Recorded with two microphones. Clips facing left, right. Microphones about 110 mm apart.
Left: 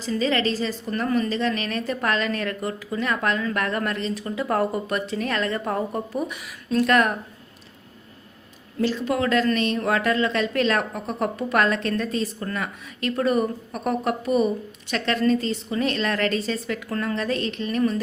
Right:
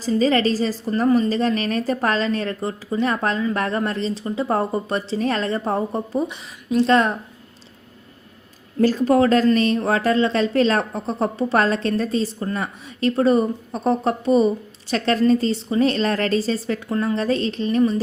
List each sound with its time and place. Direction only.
0.2 s a woman's voice: 40° right (ahead or behind)
8.8 s a woman's voice: 45° right (ahead or behind)
16.9 s a woman's voice: 20° right (ahead or behind)
17.2 s a woman's voice: 35° right (ahead or behind)